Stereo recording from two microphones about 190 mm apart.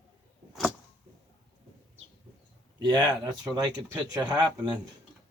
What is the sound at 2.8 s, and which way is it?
Speech, 20° right (ahead or behind).